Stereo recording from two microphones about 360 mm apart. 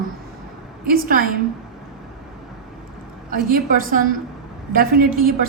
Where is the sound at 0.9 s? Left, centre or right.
Right.